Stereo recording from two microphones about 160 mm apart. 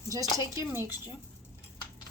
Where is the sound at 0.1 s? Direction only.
20° right (ahead or behind).